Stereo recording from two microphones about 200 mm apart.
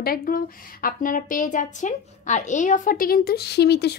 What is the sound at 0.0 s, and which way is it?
A woman's voice, 45° left (ahead or behind).